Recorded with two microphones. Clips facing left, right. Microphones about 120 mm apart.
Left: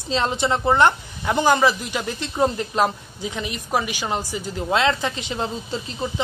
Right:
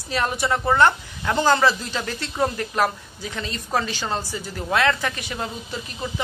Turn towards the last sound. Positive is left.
turn(degrees=25)  # may be behind; listen again after turning